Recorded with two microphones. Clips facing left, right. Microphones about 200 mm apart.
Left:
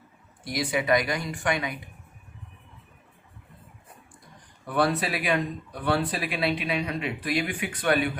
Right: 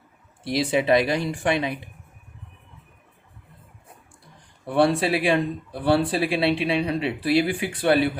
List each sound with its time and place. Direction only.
0.4 s speech: 25° right (ahead or behind)
4.6 s speech: 30° right (ahead or behind)